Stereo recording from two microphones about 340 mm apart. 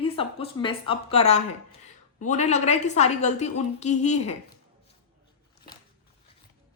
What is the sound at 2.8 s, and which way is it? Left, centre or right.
A woman's voice, centre.